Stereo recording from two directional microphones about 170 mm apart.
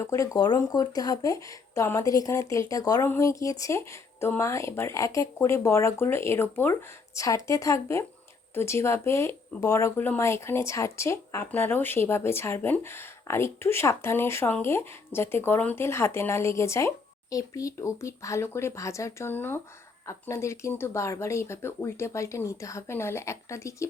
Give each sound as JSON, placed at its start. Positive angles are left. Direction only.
{"t": 0.0, "sound": "speech", "side_deg": 20}